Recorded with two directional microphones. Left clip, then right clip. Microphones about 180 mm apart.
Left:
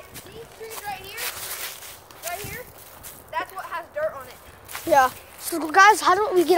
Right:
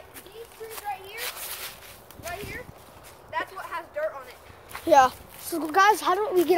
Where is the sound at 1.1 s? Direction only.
45° left (ahead or behind).